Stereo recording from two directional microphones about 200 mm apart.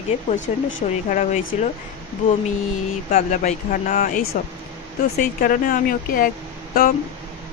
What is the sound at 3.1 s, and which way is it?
A woman's voice, 40° left (ahead or behind).